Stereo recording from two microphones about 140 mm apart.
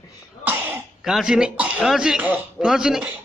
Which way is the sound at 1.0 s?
5° right (ahead or behind).